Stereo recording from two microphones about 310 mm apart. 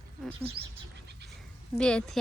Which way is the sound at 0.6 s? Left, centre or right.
Right.